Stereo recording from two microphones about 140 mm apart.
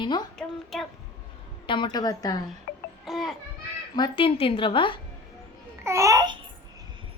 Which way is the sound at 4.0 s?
35° left (ahead or behind).